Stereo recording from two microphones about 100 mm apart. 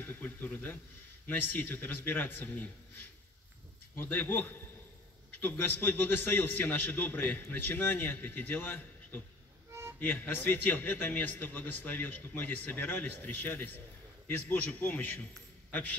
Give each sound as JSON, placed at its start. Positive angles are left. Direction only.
{"t": 0.0, "sound": "a man's voice", "side_deg": 20}
{"t": 9.7, "sound": "music", "side_deg": -25}
{"t": 9.9, "sound": "a man's voice", "side_deg": 15}